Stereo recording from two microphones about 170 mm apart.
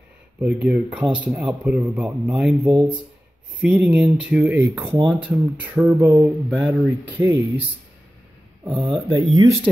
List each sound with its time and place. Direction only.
0.4 s a man's voice: 5° right (ahead or behind)
8.6 s speech: 30° right (ahead or behind)